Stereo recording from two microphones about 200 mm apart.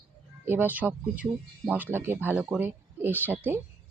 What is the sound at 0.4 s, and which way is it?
Speech, 10° right (ahead or behind).